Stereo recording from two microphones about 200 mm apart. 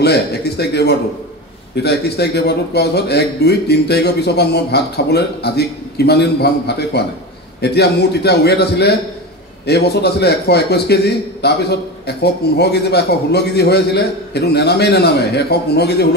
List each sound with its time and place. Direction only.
0.0 s a man's voice: 55° left (ahead or behind)